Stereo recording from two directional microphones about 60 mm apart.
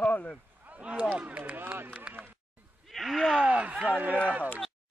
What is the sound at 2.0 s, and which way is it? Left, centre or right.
Run, right.